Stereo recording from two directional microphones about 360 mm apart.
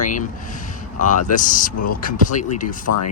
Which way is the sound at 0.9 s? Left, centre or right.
Left.